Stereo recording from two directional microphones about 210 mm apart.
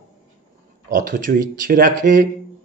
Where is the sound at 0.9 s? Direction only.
40° right (ahead or behind).